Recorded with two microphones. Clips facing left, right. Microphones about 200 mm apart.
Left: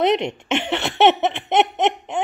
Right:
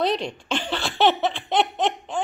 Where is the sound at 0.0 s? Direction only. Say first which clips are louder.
Left 5 dB; 20° left (ahead or behind).